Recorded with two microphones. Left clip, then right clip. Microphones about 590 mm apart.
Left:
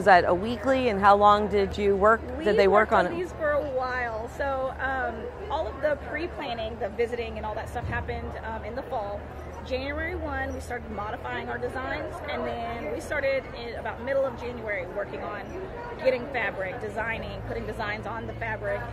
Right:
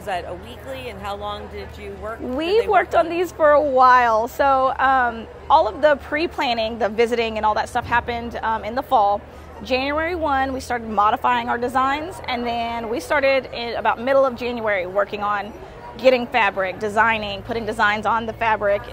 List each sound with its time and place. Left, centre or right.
0.0 s speech: left
2.7 s a woman's voice: right